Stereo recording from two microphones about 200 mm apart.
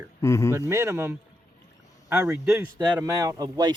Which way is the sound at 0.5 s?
15° right (ahead or behind).